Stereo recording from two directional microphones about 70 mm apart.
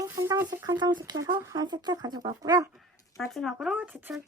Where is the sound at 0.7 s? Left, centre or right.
Right.